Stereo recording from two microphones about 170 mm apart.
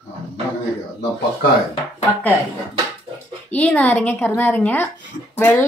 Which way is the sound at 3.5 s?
10° left (ahead or behind).